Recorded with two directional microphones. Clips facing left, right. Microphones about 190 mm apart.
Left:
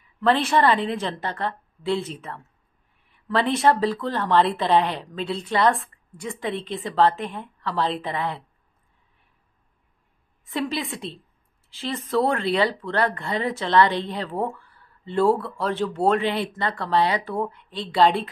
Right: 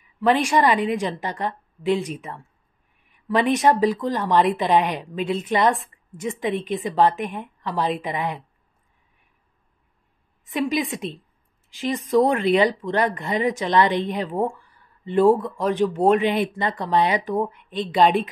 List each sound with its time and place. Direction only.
0.2 s speech: 15° right (ahead or behind)
10.5 s speech: 15° right (ahead or behind)